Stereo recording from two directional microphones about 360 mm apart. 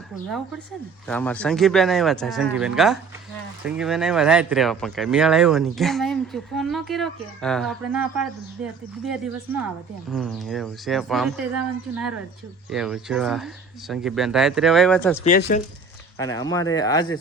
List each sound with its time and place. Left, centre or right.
1.0 s speech: centre
10.1 s speech: centre
15.2 s speech: left
16.1 s speech: centre